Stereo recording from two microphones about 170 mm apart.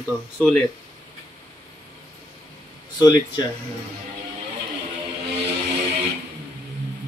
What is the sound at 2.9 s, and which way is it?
Speech, 20° left (ahead or behind).